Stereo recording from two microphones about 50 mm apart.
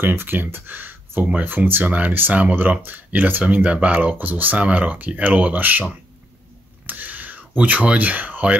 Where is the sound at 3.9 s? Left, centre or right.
Right.